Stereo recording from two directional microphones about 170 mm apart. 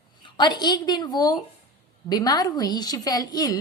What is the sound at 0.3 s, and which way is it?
A woman's voice, 25° left (ahead or behind).